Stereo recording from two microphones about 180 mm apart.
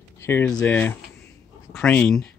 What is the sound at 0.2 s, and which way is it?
Speech, 10° left (ahead or behind).